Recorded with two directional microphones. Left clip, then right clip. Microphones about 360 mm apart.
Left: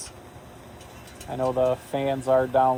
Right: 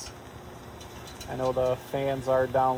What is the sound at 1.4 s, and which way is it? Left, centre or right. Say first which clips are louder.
Speech: left 3 dB; left.